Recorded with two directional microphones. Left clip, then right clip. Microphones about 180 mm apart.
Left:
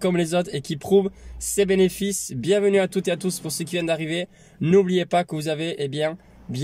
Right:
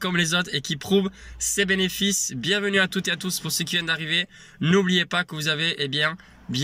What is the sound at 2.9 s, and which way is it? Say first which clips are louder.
Speech: left 2 dB; 40° right (ahead or behind).